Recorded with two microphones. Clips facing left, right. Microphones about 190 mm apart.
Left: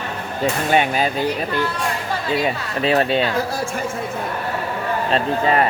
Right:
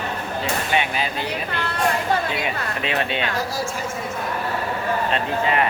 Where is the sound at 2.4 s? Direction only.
35° left (ahead or behind).